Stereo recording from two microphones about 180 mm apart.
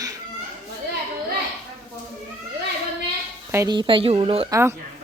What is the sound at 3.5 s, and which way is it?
Speech, 20° right (ahead or behind).